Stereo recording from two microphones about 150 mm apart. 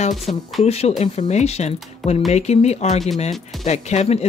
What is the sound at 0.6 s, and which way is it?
Speech, 45° left (ahead or behind).